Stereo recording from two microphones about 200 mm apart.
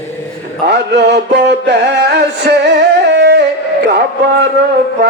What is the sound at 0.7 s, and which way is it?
Music, 60° right (ahead or behind).